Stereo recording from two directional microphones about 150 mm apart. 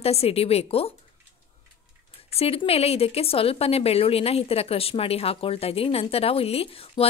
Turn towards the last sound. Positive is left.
turn(degrees=40)  # may be behind; listen again after turning